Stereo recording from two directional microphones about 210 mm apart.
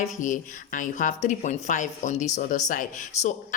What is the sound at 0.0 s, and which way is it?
Speech, 35° left (ahead or behind).